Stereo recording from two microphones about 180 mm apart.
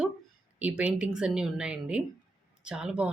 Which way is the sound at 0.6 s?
5° right (ahead or behind).